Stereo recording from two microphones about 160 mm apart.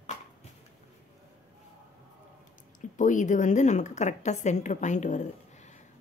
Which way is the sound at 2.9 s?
50° left (ahead or behind).